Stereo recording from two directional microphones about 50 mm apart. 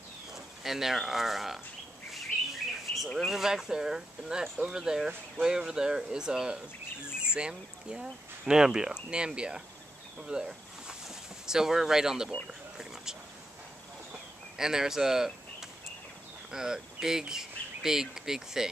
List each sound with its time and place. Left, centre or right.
0.3 s speech: centre
2.1 s bird: centre
3.2 s speech: centre
10.2 s a sound: centre
14.6 s speech: centre